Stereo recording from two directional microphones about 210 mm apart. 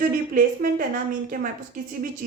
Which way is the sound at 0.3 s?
40° right (ahead or behind).